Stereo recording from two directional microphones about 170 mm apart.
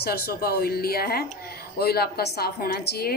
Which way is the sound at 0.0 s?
65° left (ahead or behind).